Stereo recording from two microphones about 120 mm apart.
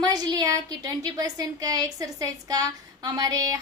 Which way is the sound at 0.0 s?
35° right (ahead or behind).